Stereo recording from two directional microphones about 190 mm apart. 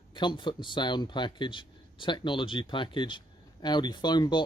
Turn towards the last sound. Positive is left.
turn(degrees=25)  # may be behind; listen again after turning